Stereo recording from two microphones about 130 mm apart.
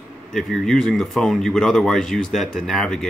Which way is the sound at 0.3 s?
Centre (ahead or behind).